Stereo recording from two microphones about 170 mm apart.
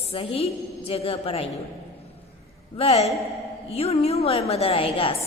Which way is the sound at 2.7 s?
35° left (ahead or behind).